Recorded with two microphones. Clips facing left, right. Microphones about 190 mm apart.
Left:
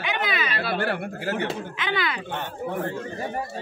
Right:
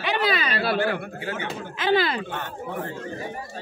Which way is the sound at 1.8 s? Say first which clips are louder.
Right 8 dB; 35° right (ahead or behind).